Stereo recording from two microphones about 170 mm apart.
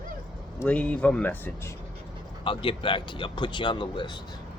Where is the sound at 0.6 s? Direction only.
10° left (ahead or behind).